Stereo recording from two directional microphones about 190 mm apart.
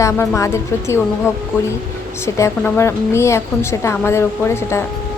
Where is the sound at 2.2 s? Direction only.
15° left (ahead or behind).